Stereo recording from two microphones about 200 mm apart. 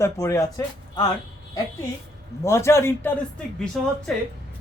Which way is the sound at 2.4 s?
15° left (ahead or behind).